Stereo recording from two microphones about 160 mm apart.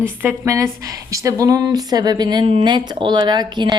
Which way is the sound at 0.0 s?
15° right (ahead or behind).